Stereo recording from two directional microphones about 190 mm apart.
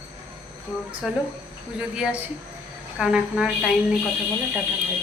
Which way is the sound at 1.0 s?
5° right (ahead or behind).